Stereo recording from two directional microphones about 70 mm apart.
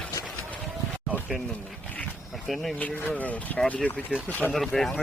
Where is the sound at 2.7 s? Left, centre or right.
Left.